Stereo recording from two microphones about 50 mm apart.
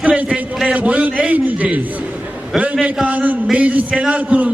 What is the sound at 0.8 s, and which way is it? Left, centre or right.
A man's voice, right.